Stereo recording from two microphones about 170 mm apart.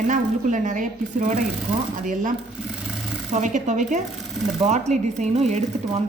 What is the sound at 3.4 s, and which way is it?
Speech, 45° right (ahead or behind).